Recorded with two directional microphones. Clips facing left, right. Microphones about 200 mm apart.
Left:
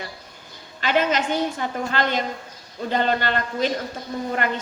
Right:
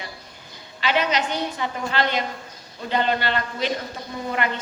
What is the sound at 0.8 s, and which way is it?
A woman's voice, 45° left (ahead or behind).